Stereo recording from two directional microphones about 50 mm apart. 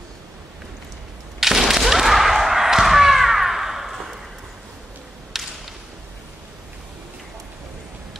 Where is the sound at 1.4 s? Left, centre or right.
Centre.